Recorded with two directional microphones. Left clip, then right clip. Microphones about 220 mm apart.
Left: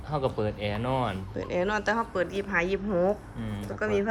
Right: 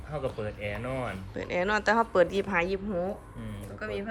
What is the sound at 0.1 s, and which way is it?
Speech, 40° left (ahead or behind).